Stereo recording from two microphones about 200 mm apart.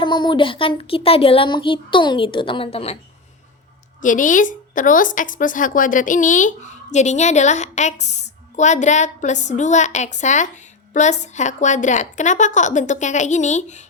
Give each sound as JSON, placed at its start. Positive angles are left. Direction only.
{"t": 0.0, "sound": "speech", "side_deg": 25}
{"t": 4.0, "sound": "a woman's voice", "side_deg": 40}